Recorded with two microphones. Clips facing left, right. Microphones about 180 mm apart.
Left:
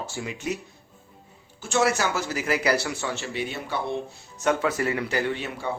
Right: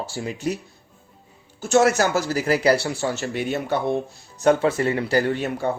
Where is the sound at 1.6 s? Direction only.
45° right (ahead or behind).